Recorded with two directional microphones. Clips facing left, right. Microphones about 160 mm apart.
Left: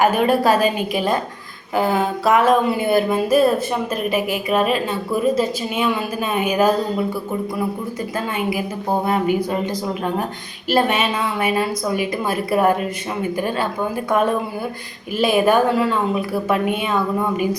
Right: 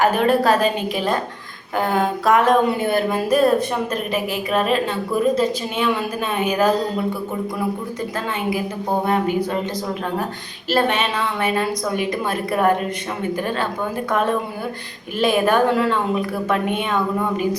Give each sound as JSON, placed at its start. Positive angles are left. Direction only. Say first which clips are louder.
{"t": 0.0, "sound": "a woman's voice", "louder": "left 1 dB", "side_deg": 10}
{"t": 9.0, "sound": "a woman's voice", "louder": "left 1 dB", "side_deg": 10}
{"t": 10.7, "sound": "a woman's voice", "louder": "left 1 dB", "side_deg": 10}
{"t": 15.2, "sound": "a woman's voice", "louder": "left 1 dB", "side_deg": 10}